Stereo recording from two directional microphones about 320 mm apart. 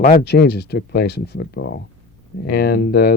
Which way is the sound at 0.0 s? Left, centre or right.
Left.